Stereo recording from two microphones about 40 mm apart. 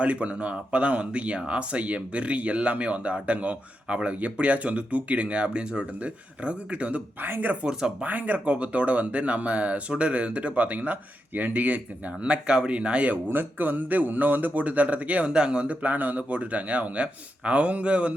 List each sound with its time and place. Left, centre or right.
0.0 s speech: right
7.2 s speech: right
7.6 s speech: centre
8.0 s a man's voice: right
8.4 s speech: right
12.2 s speech: right
13.1 s a man's voice: right